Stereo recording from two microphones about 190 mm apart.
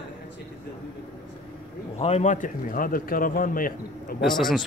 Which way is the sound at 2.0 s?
35° left (ahead or behind).